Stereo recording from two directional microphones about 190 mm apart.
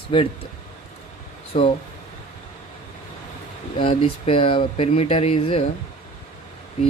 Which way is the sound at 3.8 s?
30° left (ahead or behind).